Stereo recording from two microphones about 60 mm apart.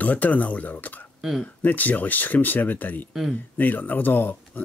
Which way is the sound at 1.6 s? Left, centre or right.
Left.